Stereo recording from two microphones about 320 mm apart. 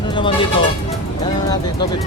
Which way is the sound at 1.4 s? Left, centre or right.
Centre.